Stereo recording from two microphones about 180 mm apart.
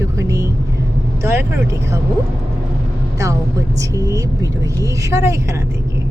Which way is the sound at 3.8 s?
20° right (ahead or behind).